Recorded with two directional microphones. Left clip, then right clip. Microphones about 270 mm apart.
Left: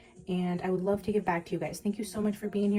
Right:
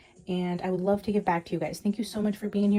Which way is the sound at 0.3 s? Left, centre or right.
Right.